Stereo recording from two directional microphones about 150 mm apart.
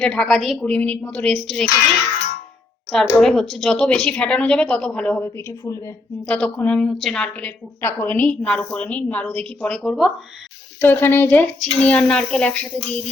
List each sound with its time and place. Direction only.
0.0 s speech: 5° left (ahead or behind)
3.2 s a woman's voice: 5° left (ahead or behind); by 5.9 s 20° left (ahead or behind)
6.2 s a woman's voice: 10° left (ahead or behind)
10.8 s a woman's voice: 15° left (ahead or behind)